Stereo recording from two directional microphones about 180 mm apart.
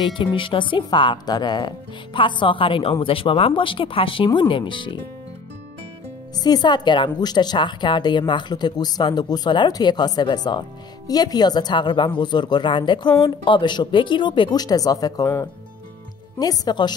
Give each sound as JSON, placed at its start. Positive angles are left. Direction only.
{"t": 0.0, "sound": "speech", "side_deg": 25}
{"t": 6.3, "sound": "speech", "side_deg": 20}